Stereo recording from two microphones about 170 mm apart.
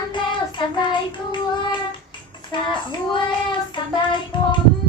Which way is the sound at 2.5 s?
25° left (ahead or behind).